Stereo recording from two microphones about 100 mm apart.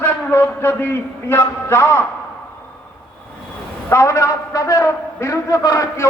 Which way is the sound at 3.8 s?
30° left (ahead or behind).